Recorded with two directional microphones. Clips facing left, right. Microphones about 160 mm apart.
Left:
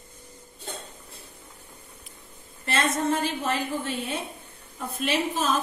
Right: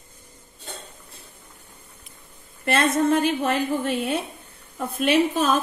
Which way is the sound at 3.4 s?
65° right (ahead or behind).